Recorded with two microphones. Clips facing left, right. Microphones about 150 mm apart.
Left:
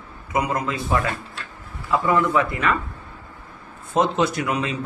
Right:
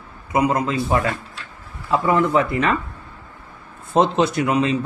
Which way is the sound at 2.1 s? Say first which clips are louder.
Right 2 dB; 30° right (ahead or behind).